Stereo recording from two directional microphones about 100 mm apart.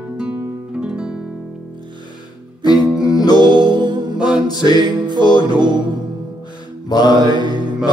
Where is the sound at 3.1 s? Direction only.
40° left (ahead or behind).